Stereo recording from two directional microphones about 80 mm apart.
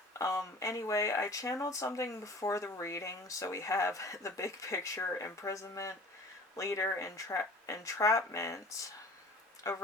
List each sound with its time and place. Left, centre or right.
0.1 s speech: left